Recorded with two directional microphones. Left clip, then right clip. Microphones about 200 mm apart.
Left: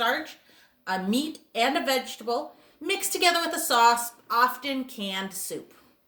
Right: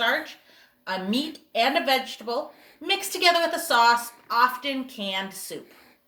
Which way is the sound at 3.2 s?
20° left (ahead or behind).